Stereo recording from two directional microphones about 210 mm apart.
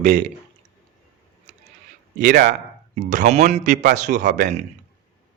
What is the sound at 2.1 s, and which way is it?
Speech, 55° right (ahead or behind).